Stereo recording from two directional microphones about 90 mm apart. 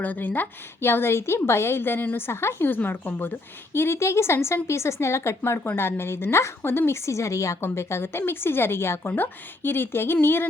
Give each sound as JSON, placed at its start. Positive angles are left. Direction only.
{"t": 0.0, "sound": "speech", "side_deg": 20}